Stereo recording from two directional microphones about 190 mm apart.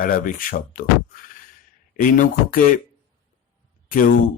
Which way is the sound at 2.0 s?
45° left (ahead or behind).